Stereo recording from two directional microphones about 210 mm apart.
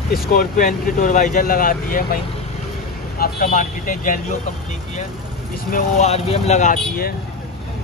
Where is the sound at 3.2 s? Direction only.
45° left (ahead or behind).